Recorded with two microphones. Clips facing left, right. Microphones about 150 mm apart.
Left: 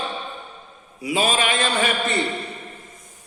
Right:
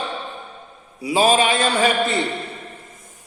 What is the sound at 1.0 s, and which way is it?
Speech, 35° right (ahead or behind).